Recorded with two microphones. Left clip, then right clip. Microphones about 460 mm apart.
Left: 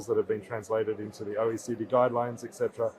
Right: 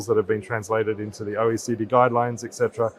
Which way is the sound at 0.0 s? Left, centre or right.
Right.